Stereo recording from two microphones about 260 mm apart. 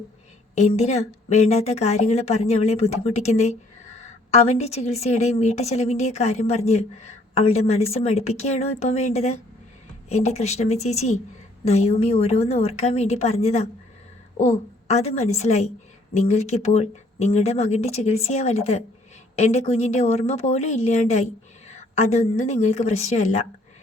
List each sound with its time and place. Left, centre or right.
0.5 s a woman's voice: left